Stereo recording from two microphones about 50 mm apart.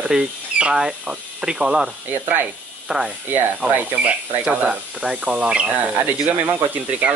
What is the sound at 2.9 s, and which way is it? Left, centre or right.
Speech, centre.